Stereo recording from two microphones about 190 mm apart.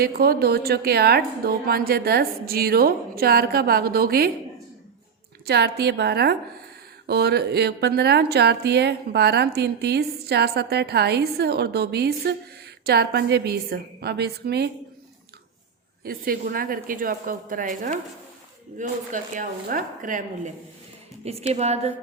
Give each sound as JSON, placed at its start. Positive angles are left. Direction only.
{"t": 0.0, "sound": "a woman's voice", "side_deg": -55}
{"t": 5.5, "sound": "speech", "side_deg": -60}
{"t": 16.0, "sound": "a woman's voice", "side_deg": -50}